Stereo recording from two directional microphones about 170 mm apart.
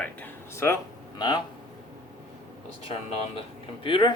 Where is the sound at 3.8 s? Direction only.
30° left (ahead or behind).